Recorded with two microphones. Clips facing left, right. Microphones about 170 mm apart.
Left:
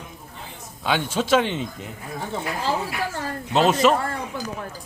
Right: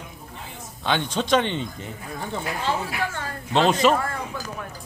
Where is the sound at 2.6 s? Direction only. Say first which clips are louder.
Even; 35° left (ahead or behind).